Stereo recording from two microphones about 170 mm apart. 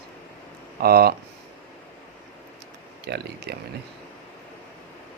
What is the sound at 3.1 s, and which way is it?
Speech, 75° right (ahead or behind).